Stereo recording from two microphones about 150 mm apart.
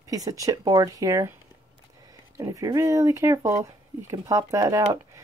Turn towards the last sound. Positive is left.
turn(degrees=-20)  # may be behind; listen again after turning